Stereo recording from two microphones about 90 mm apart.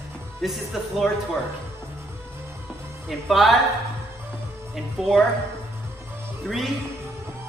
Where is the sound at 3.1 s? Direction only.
Centre (ahead or behind).